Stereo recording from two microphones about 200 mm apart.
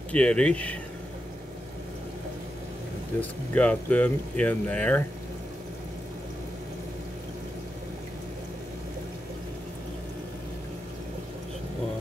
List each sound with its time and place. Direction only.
0.1 s speech: 5° left (ahead or behind)
3.2 s speech: 5° left (ahead or behind)